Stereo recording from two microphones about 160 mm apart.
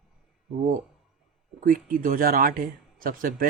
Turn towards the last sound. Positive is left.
turn(degrees=-60)  # may be behind; listen again after turning